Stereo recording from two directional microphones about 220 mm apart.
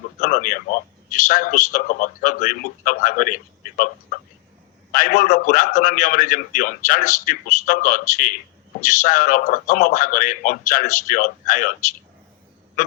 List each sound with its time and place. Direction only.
0.2 s a man's voice: 40° left (ahead or behind)